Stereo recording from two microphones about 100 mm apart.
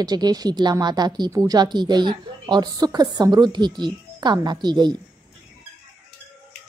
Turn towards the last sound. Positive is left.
turn(degrees=-45)  # may be behind; listen again after turning